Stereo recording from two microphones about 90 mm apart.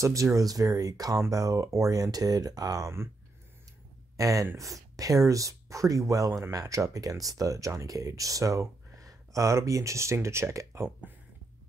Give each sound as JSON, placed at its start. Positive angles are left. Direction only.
{"t": 0.0, "sound": "speech", "side_deg": -35}
{"t": 4.2, "sound": "speech", "side_deg": -40}